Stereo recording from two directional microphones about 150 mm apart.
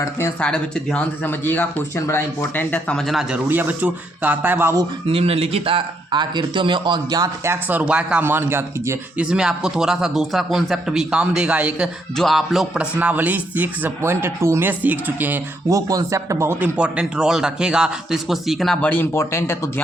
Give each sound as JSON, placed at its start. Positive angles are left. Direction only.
{"t": 0.3, "sound": "speech", "side_deg": 5}
{"t": 5.0, "sound": "speech", "side_deg": -40}
{"t": 9.3, "sound": "speech", "side_deg": -5}
{"t": 15.9, "sound": "speech", "side_deg": -20}